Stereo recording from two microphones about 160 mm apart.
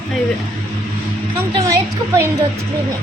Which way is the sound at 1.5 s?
20° right (ahead or behind).